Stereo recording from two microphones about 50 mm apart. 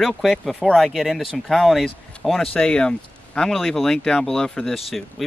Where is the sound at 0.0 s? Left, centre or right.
Centre.